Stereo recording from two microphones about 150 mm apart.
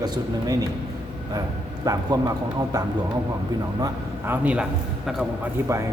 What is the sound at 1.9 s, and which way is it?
Speech, 25° right (ahead or behind).